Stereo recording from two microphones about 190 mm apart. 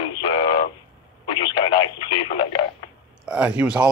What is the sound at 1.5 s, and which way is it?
Radio, 25° left (ahead or behind).